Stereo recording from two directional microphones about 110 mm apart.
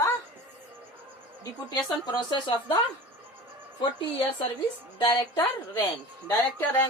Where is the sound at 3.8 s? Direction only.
55° left (ahead or behind).